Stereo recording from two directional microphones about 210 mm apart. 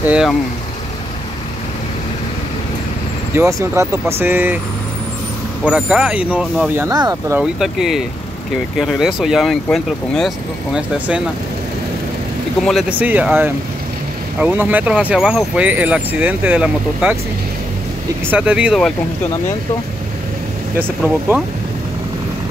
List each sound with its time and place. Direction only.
0.0 s speech: 5° right (ahead or behind)
3.3 s speech: 15° right (ahead or behind)
5.7 s speech: 5° right (ahead or behind)
12.6 s speech: 5° right (ahead or behind)
18.2 s speech: 5° right (ahead or behind)
20.7 s speech: 10° right (ahead or behind)